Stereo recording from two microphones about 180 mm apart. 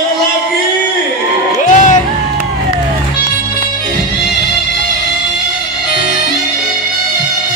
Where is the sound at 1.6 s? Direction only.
45° left (ahead or behind).